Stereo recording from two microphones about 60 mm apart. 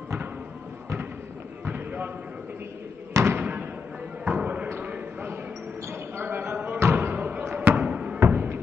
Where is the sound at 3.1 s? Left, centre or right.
Right.